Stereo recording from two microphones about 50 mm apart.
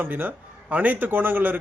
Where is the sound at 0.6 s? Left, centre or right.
Right.